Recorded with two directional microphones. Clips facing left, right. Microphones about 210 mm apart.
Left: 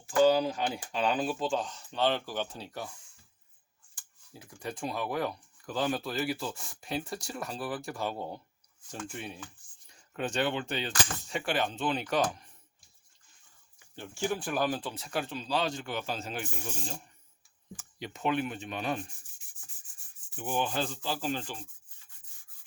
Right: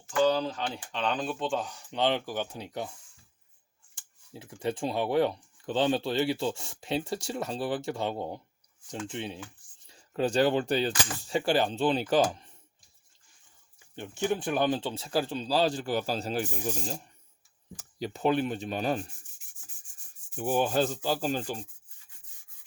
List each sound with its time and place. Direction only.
0.2 s speech: 10° left (ahead or behind); by 2.9 s 20° right (ahead or behind)
3.9 s speech: 25° right (ahead or behind)
13.9 s speech: 20° right (ahead or behind); by 16.7 s 35° right (ahead or behind)
17.7 s speech: 35° right (ahead or behind)
20.3 s sanding: 40° right (ahead or behind)